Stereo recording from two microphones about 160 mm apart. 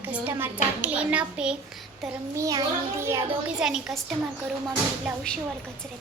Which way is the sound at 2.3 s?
20° right (ahead or behind).